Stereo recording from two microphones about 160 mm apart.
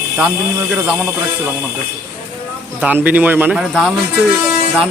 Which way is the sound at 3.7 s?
Centre (ahead or behind).